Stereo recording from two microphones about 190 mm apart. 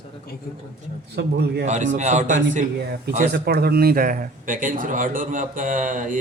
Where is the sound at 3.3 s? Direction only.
55° right (ahead or behind).